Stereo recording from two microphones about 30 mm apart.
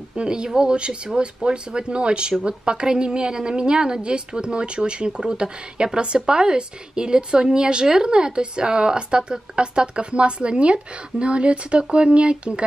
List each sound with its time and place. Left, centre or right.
0.1 s a woman's voice: right